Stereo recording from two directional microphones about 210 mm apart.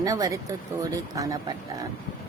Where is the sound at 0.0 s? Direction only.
15° right (ahead or behind).